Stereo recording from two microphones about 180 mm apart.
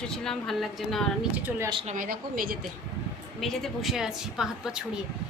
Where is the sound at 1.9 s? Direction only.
50° right (ahead or behind).